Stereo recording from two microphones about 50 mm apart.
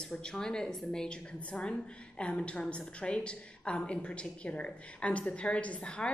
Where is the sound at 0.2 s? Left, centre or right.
Centre.